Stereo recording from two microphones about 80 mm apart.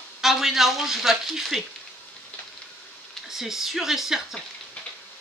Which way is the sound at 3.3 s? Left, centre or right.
Centre.